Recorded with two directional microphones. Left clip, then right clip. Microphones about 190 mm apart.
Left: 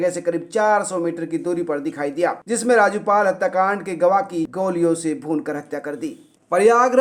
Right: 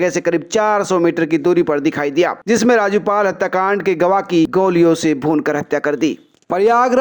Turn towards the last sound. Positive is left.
turn(degrees=-40)  # may be behind; listen again after turning